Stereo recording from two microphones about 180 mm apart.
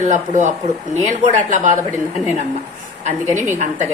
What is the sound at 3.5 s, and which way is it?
Speech, 40° right (ahead or behind).